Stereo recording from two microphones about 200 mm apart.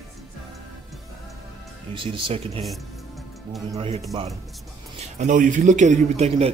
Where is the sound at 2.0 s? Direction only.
25° right (ahead or behind).